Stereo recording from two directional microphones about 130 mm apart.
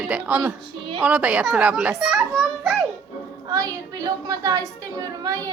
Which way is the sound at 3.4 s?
30° right (ahead or behind).